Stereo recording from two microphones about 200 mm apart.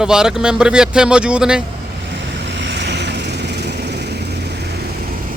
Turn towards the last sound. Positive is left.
turn(degrees=-55)  # may be behind; listen again after turning